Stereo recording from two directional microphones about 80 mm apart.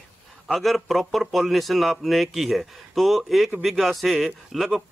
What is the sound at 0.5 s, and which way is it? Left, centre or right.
A man's voice, centre.